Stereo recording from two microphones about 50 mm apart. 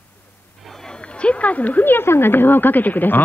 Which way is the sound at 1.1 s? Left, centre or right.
Left.